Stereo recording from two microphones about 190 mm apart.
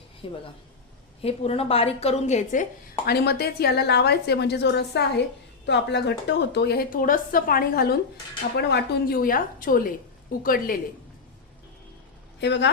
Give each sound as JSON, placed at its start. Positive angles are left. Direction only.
{"t": 0.2, "sound": "a woman's voice", "side_deg": 30}
{"t": 3.1, "sound": "a woman's voice", "side_deg": 55}
{"t": 12.4, "sound": "speech", "side_deg": 65}